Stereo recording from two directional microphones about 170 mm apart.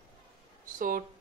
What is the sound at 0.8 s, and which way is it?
Speech, 55° right (ahead or behind).